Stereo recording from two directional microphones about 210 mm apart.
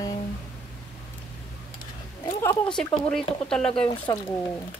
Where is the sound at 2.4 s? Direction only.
15° left (ahead or behind).